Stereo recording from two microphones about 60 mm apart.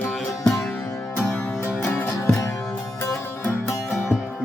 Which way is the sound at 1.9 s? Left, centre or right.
Left.